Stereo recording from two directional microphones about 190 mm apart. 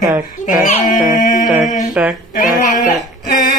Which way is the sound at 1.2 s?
45° left (ahead or behind).